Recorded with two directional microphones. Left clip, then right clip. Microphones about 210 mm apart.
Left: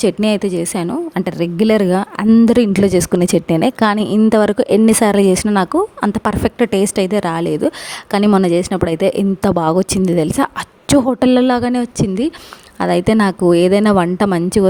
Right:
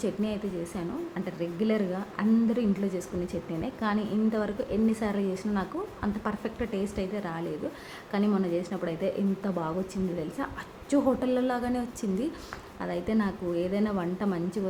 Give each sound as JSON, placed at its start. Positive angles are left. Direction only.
{"t": 0.0, "sound": "a woman's voice", "side_deg": 50}